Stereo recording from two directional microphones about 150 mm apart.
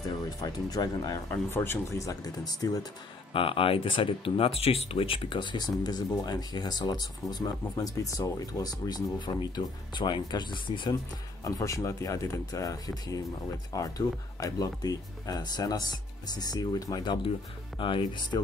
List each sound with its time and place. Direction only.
0.4 s speech: 25° left (ahead or behind)
1.3 s speech: 15° left (ahead or behind)
3.3 s speech: 35° left (ahead or behind)